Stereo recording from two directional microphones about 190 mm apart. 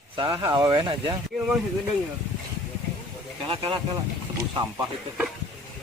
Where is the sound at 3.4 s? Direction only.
30° right (ahead or behind).